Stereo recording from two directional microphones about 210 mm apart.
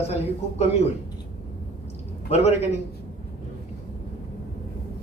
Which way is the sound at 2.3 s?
30° left (ahead or behind).